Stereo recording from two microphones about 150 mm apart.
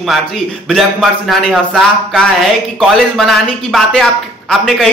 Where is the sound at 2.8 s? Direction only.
5° left (ahead or behind).